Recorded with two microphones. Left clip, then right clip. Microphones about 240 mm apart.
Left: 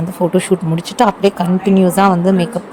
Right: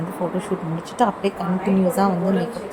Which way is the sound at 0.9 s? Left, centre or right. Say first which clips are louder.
Left 8 dB; left.